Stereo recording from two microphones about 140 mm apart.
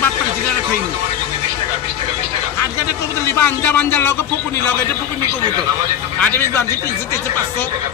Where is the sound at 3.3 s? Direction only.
15° left (ahead or behind).